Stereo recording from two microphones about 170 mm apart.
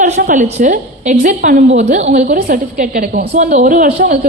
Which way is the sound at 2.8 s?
55° right (ahead or behind).